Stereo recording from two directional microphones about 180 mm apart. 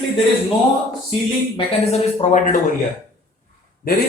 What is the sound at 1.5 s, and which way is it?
Speech, 35° left (ahead or behind).